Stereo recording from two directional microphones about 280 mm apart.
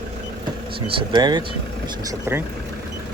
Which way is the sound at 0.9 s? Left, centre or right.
Centre.